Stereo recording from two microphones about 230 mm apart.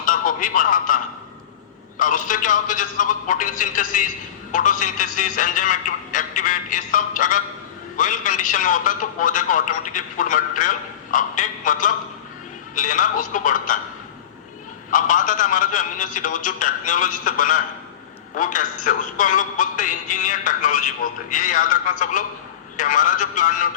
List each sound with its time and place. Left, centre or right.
0.0 s music: left
2.0 s a man's voice: left
14.8 s a man's voice: left